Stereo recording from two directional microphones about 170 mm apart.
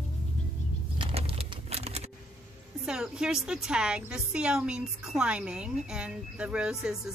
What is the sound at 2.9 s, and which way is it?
A woman's voice, 5° right (ahead or behind).